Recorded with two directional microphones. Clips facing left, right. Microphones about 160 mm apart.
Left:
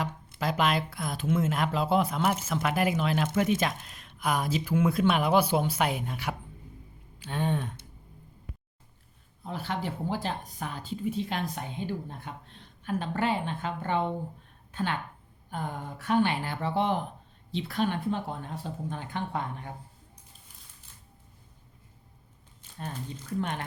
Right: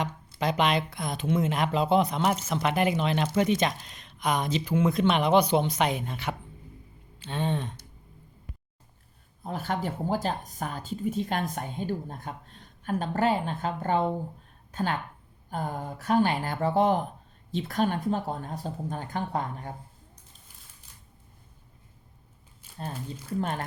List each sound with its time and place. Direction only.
0.0 s speech: centre (ahead or behind)
7.2 s a sound: 10° left (ahead or behind)
9.4 s a woman's voice: 45° right (ahead or behind)
22.6 s crumpling: 10° right (ahead or behind)
23.4 s speech: 40° right (ahead or behind)